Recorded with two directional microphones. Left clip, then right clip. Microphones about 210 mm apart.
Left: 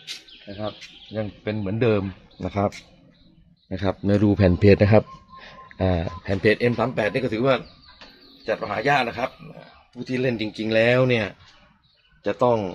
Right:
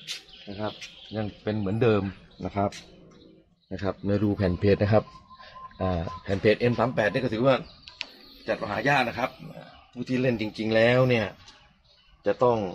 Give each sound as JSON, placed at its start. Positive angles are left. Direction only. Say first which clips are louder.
{"t": 0.6, "sound": "speech", "louder": "left 2 dB", "side_deg": 20}
{"t": 3.7, "sound": "a man's voice", "louder": "left 5 dB", "side_deg": 45}
{"t": 12.2, "sound": "a man's voice", "louder": "left 2 dB", "side_deg": 50}